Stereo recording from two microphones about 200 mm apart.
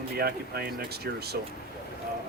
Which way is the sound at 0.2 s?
50° right (ahead or behind).